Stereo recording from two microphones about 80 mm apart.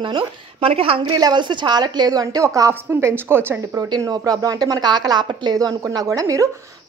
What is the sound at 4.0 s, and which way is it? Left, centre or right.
A woman's voice, right.